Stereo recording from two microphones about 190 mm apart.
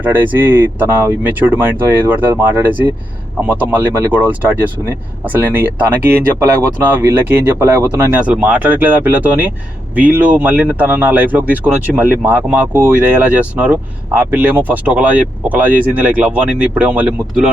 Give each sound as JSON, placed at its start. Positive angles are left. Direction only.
{"t": 0.0, "sound": "speech", "side_deg": -10}